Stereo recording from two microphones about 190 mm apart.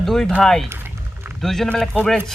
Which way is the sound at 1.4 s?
Centre (ahead or behind).